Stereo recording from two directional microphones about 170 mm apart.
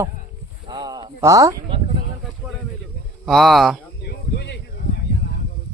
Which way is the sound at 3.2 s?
Centre (ahead or behind).